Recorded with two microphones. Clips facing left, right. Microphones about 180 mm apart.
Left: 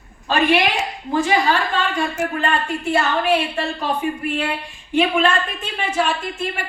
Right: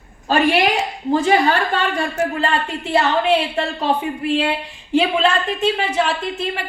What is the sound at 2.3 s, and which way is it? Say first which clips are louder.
A woman's voice: right 1 dB; 30° right (ahead or behind).